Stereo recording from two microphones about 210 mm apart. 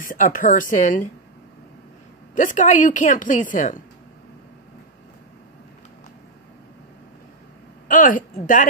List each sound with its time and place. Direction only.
0.0 s a woman's voice: 40° left (ahead or behind)
2.3 s a woman's voice: 35° left (ahead or behind)
7.9 s a woman's voice: 40° left (ahead or behind)